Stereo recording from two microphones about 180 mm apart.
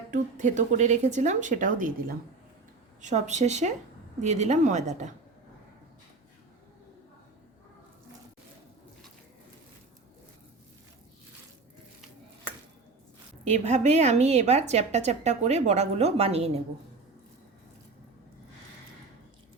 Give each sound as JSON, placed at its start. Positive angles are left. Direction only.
{"t": 0.1, "sound": "a woman's voice", "side_deg": -45}
{"t": 13.4, "sound": "a woman's voice", "side_deg": -40}